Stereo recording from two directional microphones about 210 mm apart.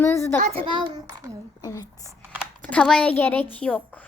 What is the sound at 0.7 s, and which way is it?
Speech, 20° right (ahead or behind).